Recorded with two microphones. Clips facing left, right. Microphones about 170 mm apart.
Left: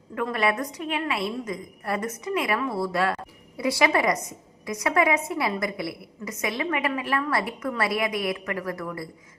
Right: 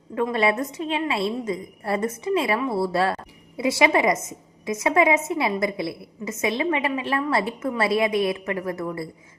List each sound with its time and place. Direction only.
0.1 s a woman's voice: 25° right (ahead or behind)